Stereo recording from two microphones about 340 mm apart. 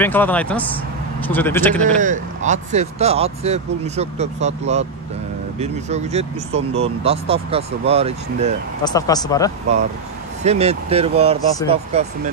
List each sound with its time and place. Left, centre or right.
0.0 s speech: centre
2.0 s speech: right
8.8 s speech: centre
10.4 s speech: centre